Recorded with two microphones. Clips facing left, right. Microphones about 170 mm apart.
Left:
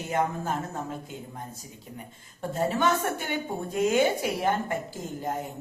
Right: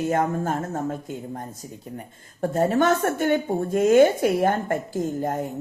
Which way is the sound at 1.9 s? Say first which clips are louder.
Right 5 dB; 50° right (ahead or behind).